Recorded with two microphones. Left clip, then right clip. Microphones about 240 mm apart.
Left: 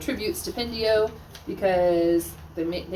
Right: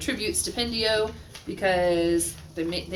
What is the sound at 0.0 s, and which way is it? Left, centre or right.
A woman's voice, centre.